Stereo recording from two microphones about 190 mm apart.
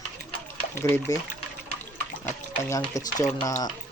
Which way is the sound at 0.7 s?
10° left (ahead or behind).